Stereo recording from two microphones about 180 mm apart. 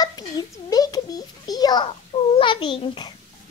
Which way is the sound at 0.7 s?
20° left (ahead or behind).